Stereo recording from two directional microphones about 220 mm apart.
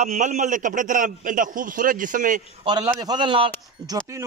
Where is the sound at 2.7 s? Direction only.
20° right (ahead or behind).